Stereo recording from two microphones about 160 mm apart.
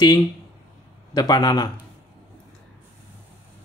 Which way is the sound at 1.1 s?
25° left (ahead or behind).